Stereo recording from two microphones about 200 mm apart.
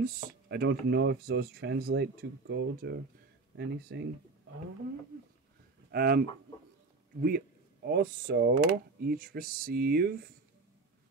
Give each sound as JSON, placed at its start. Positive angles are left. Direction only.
{"t": 0.0, "sound": "speech", "side_deg": -50}
{"t": 5.9, "sound": "speech", "side_deg": -50}